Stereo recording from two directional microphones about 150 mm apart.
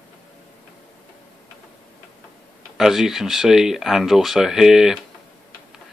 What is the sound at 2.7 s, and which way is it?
Speech, centre (ahead or behind).